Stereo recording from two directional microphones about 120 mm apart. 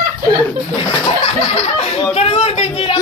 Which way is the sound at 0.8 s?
60° left (ahead or behind).